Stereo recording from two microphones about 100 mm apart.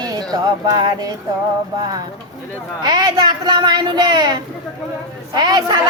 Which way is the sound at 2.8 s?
40° right (ahead or behind).